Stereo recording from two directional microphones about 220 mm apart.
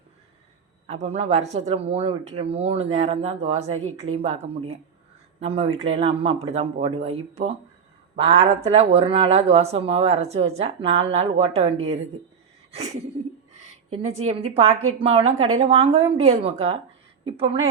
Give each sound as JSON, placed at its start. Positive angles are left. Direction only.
{"t": 1.0, "sound": "speech", "side_deg": -25}
{"t": 8.1, "sound": "speech", "side_deg": -30}
{"t": 13.5, "sound": "a woman's voice", "side_deg": -30}